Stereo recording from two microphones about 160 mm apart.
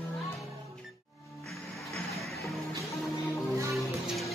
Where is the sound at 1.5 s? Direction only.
Centre (ahead or behind).